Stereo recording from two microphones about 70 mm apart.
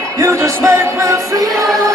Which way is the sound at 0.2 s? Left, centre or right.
Right.